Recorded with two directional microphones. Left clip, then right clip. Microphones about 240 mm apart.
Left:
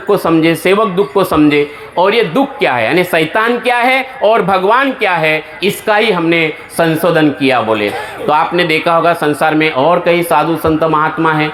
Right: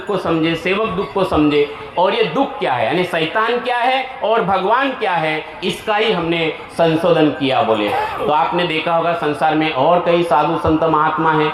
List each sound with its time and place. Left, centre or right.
0.1 s speech: left